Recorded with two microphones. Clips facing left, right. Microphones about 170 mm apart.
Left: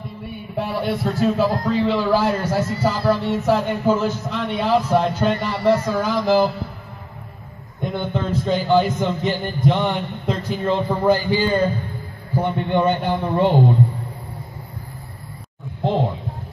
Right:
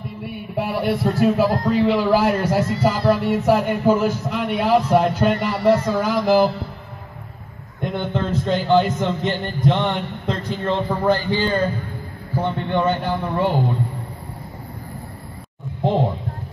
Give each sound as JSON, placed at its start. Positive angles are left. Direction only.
{"t": 0.2, "sound": "a man's voice", "side_deg": -5}
{"t": 7.8, "sound": "a man's voice", "side_deg": 0}
{"t": 15.8, "sound": "a sound", "side_deg": -15}